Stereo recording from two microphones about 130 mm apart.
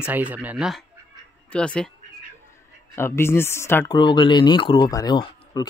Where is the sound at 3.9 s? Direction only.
35° left (ahead or behind).